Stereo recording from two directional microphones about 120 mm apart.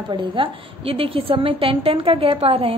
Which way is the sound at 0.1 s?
45° right (ahead or behind).